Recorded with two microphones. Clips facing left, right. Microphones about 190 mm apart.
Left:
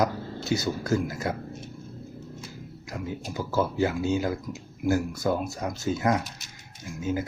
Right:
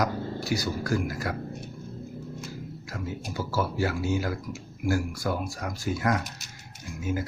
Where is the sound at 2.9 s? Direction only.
15° left (ahead or behind).